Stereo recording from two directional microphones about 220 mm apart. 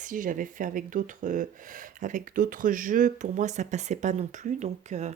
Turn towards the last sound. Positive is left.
turn(degrees=-30)  # may be behind; listen again after turning